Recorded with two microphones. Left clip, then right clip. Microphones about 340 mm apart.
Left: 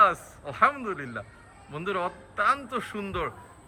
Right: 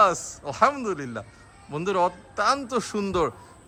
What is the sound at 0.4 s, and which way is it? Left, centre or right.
A man's voice, centre.